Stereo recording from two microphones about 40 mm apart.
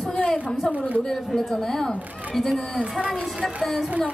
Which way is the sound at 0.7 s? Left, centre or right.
Right.